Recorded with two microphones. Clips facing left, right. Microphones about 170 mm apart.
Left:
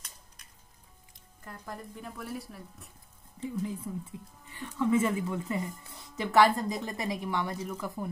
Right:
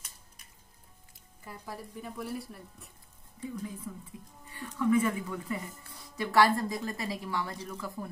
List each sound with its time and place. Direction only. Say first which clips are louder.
1.4 s speech: even; 5° right (ahead or behind)
3.3 s a woman's voice: left 4 dB; 25° left (ahead or behind)